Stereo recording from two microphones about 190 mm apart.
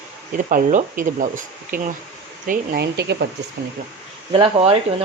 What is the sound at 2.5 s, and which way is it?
Speech, 60° right (ahead or behind).